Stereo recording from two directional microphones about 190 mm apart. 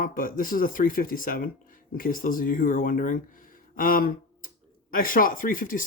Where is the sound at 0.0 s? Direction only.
45° left (ahead or behind).